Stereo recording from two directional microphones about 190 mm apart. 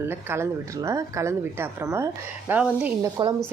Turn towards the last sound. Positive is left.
turn(degrees=-20)  # may be behind; listen again after turning